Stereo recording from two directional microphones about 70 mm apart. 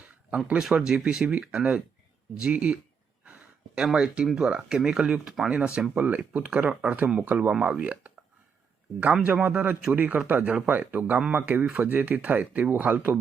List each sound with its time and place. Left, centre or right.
0.3 s speech: centre
3.9 s a man's voice: centre
9.2 s a man's voice: centre